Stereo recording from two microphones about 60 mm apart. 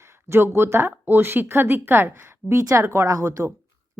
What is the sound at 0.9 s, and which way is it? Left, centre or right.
A woman's voice, right.